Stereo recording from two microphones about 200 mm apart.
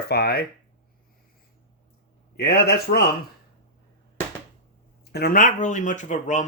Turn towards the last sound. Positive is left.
turn(degrees=40)  # may be behind; listen again after turning